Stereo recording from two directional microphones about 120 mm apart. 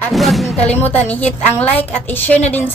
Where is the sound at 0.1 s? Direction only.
Centre (ahead or behind).